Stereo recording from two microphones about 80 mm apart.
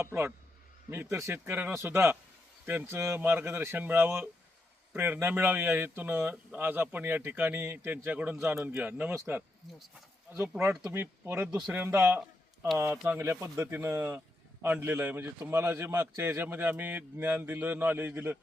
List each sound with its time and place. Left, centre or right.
0.0 s a man's voice: right
10.9 s a man's voice: right